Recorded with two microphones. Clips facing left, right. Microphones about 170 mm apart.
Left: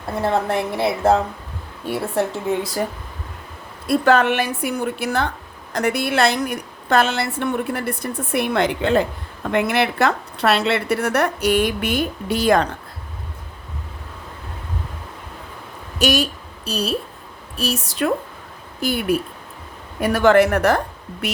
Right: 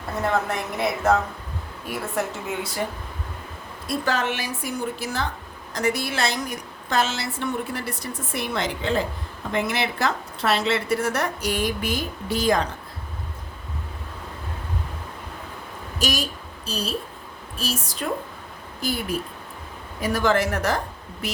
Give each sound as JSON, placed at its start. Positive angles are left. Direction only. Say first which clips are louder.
{"t": 0.2, "sound": "a woman's voice", "louder": "left 4 dB", "side_deg": 30}
{"t": 3.8, "sound": "a woman's voice", "louder": "left 9 dB", "side_deg": 60}
{"t": 16.0, "sound": "a woman's voice", "louder": "left 7 dB", "side_deg": 65}